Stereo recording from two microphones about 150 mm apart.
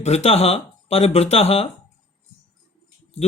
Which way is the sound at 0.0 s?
45° left (ahead or behind).